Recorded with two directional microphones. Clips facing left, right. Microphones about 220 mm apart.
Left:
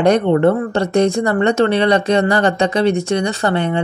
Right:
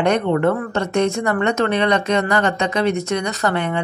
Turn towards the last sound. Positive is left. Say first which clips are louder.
# left 3 dB
turn(degrees=30)  # may be behind; listen again after turning